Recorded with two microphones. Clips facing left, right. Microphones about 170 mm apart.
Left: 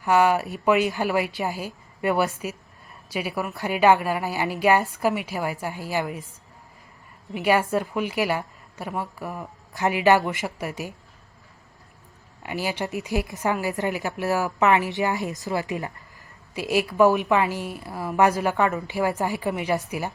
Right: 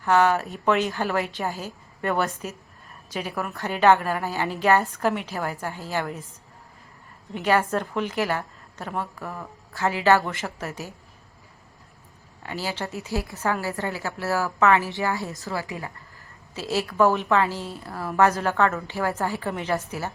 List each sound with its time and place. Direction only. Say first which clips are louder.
0.0 s a woman's voice: left 1 dB; 10° left (ahead or behind)
7.3 s a woman's voice: left 1 dB; 10° left (ahead or behind)
12.4 s a woman's voice: left 3 dB; 15° left (ahead or behind)